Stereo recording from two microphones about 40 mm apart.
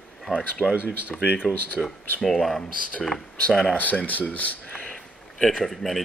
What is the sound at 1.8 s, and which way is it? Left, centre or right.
Speech, right.